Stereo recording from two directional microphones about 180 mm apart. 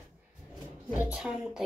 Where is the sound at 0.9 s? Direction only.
5° right (ahead or behind).